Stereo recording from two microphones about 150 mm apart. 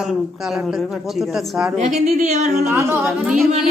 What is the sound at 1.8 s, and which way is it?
Singing, 50° right (ahead or behind).